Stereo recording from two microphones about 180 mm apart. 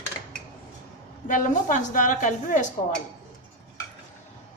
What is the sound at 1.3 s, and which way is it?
A woman's voice, 45° left (ahead or behind).